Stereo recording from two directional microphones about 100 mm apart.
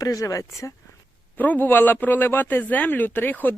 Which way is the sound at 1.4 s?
20° left (ahead or behind).